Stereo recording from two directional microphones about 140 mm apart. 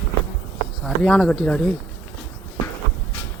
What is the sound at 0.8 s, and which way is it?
Speech, centre (ahead or behind).